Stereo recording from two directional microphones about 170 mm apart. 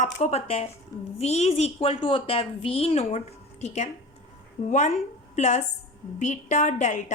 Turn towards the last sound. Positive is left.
turn(degrees=45)  # may be behind; listen again after turning